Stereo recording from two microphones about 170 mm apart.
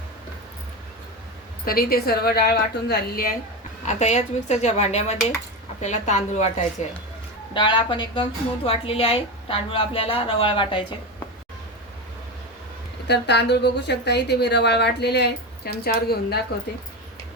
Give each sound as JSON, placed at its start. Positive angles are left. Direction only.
{"t": 1.6, "sound": "a woman's voice", "side_deg": 60}
{"t": 3.8, "sound": "a woman's voice", "side_deg": 40}
{"t": 7.5, "sound": "a woman's voice", "side_deg": 30}
{"t": 13.1, "sound": "a woman's voice", "side_deg": 80}